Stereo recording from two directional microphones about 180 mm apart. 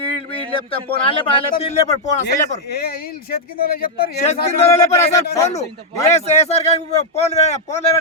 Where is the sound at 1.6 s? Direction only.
35° left (ahead or behind).